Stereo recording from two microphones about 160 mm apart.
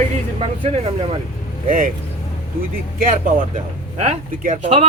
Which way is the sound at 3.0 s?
60° right (ahead or behind).